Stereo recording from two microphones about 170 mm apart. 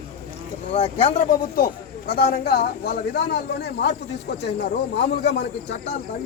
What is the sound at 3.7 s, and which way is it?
Speech, 85° left.